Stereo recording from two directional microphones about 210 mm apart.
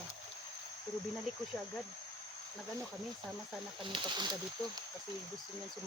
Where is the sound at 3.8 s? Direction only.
25° right (ahead or behind).